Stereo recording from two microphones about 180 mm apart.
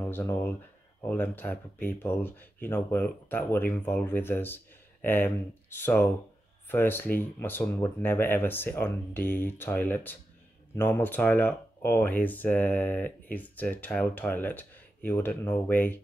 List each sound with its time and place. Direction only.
0.0 s speech: 15° left (ahead or behind)